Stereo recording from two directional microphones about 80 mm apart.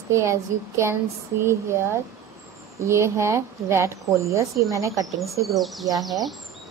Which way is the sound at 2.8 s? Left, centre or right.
Right.